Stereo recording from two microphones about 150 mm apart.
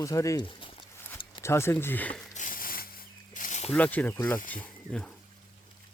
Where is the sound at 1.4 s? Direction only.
15° left (ahead or behind).